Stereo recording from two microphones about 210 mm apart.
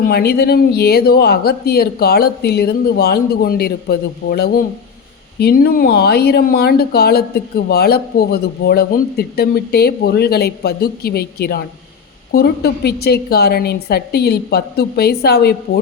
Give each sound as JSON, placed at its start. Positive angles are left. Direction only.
{"t": 0.0, "sound": "speech", "side_deg": 50}